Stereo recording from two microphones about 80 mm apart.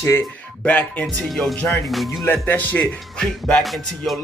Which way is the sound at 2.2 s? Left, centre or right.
Left.